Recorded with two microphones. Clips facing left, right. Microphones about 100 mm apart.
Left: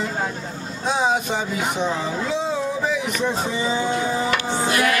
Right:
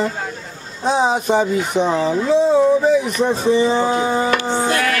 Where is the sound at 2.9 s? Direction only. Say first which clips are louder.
Right 7 dB; 35° right (ahead or behind).